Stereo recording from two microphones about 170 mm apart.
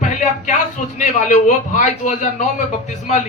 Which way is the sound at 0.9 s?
45° left (ahead or behind).